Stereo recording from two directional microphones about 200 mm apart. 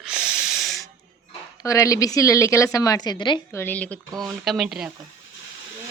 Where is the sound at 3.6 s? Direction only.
10° left (ahead or behind).